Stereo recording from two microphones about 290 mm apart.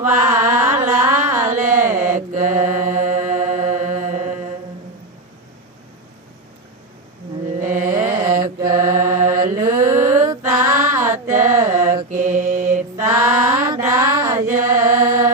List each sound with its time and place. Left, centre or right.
0.2 s music: centre
2.1 s mantra: right
2.5 s mantra: centre
3.2 s mantra: right
7.6 s mantra: centre
12.0 s mantra: right
12.7 s mantra: centre